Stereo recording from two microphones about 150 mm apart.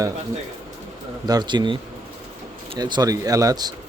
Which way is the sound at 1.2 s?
30° right (ahead or behind).